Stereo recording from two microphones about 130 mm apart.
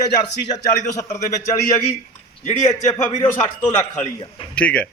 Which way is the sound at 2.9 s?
65° left (ahead or behind).